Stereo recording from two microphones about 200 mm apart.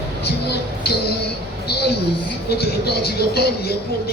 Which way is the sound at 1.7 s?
55° left (ahead or behind).